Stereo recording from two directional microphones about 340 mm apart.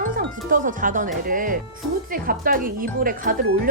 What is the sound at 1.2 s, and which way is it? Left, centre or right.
Speech, right.